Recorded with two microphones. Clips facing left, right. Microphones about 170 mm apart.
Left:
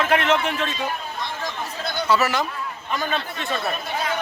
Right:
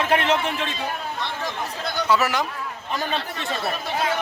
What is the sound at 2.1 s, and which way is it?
Speech, 15° right (ahead or behind).